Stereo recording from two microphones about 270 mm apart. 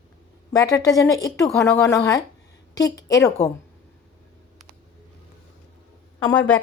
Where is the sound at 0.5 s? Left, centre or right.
Centre.